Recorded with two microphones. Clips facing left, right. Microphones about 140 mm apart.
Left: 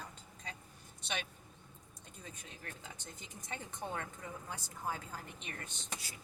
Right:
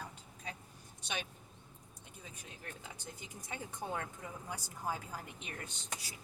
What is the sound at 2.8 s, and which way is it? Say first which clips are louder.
Speech: right 2 dB; 10° right (ahead or behind).